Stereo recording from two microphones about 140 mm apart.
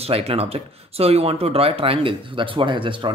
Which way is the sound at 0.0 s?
45° right (ahead or behind).